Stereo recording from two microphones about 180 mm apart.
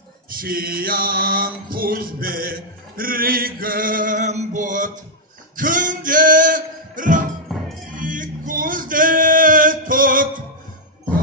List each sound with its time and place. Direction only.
0.4 s mantra: 55° right (ahead or behind)
5.6 s music: 50° right (ahead or behind)